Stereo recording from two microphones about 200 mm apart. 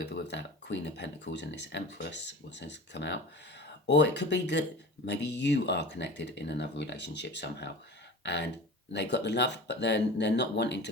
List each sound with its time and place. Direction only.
0.0 s speech: 60° left (ahead or behind)
8.2 s a sound: 55° left (ahead or behind)
8.9 s speech: 60° left (ahead or behind)